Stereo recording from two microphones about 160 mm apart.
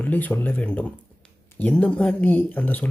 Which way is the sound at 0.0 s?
10° left (ahead or behind).